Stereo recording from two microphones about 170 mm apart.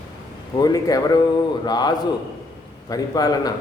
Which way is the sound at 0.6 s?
20° left (ahead or behind).